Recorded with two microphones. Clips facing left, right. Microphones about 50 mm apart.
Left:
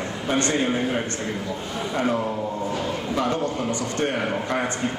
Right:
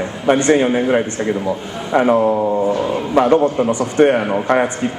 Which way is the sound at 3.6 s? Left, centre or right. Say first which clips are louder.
Right 11 dB; right.